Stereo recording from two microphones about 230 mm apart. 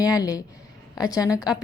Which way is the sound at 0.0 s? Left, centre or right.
Centre.